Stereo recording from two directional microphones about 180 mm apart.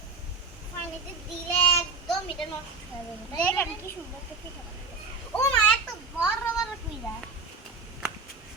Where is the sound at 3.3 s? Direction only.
10° left (ahead or behind).